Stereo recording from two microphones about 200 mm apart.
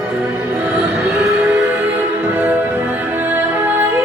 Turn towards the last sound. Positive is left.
turn(degrees=-15)  # may be behind; listen again after turning